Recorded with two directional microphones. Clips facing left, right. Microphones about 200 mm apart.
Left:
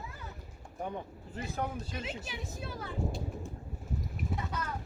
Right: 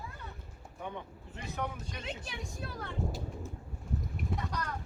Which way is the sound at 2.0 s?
5° left (ahead or behind).